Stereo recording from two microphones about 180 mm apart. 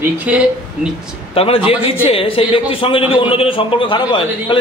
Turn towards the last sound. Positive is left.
turn(degrees=30)  # may be behind; listen again after turning